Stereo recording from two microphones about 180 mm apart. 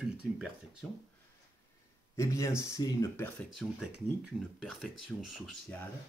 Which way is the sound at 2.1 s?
15° left (ahead or behind).